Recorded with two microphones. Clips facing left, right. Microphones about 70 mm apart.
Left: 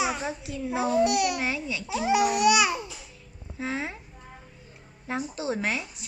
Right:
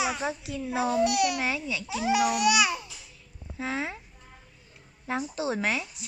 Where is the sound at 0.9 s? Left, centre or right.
Centre.